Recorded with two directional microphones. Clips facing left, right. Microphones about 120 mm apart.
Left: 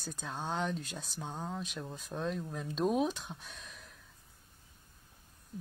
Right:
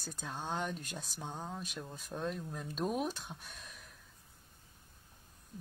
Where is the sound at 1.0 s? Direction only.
10° left (ahead or behind).